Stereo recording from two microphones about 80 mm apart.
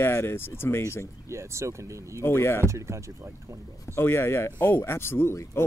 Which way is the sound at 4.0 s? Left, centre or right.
Left.